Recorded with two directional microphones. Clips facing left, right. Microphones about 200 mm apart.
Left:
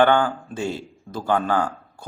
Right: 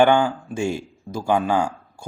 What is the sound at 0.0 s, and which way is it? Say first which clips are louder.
Speech: right 1 dB; 10° right (ahead or behind).